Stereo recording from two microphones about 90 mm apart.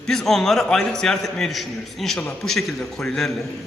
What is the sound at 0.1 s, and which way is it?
A man's voice, 5° left (ahead or behind).